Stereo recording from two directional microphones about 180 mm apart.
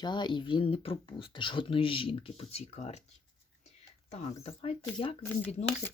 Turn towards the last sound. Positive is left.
turn(degrees=35)  # may be behind; listen again after turning